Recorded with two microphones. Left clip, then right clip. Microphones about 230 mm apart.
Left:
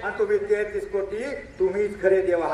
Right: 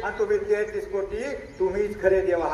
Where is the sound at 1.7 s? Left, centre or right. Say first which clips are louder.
Even; left.